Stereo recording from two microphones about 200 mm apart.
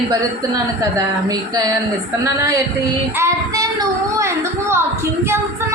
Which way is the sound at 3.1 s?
15° right (ahead or behind).